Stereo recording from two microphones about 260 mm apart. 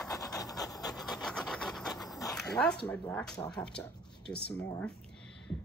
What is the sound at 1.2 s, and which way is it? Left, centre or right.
Dog, centre.